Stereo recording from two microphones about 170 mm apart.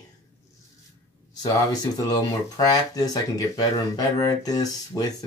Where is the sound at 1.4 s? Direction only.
25° left (ahead or behind).